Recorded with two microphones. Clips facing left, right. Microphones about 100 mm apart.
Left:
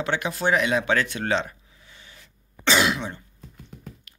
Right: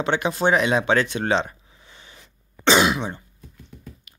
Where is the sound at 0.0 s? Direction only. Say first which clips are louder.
Right 4 dB; 25° right (ahead or behind).